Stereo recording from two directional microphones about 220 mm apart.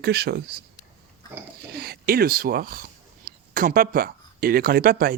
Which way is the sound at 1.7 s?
45° right (ahead or behind).